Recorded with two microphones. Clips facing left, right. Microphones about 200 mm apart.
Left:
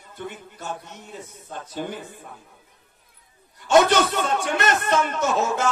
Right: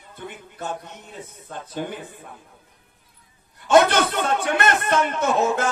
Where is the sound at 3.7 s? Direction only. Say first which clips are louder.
Right 1 dB; 55° right (ahead or behind).